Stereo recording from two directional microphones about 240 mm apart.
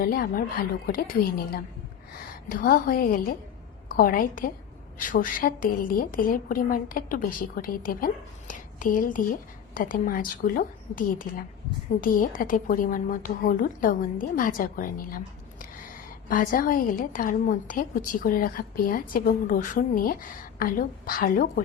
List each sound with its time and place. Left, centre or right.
0.0 s a woman's voice: left
16.3 s a woman's voice: left